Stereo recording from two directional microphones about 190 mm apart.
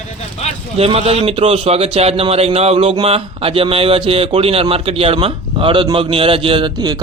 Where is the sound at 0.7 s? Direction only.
30° right (ahead or behind).